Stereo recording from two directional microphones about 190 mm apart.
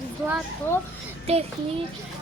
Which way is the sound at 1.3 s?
35° right (ahead or behind).